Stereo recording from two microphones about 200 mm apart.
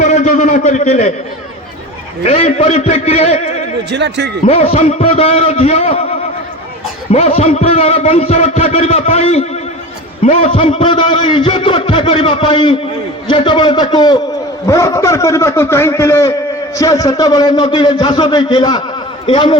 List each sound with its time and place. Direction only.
0.0 s a man's voice: 35° left (ahead or behind)
2.2 s a man's voice: 30° left (ahead or behind)
3.9 s a man's voice: 60° right (ahead or behind)
4.4 s a man's voice: 30° left (ahead or behind)